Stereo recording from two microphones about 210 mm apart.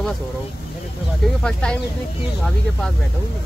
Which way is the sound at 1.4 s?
5° left (ahead or behind).